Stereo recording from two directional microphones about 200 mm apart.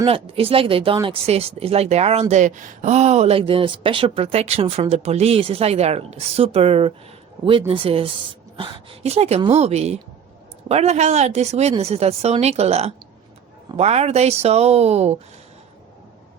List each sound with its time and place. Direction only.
0.0 s speech: 30° right (ahead or behind)